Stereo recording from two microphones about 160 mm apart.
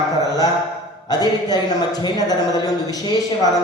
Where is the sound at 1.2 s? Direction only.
25° left (ahead or behind).